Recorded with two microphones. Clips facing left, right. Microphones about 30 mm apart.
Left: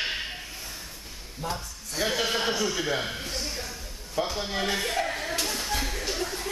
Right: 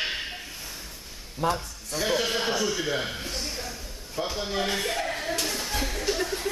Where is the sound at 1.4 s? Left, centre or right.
Right.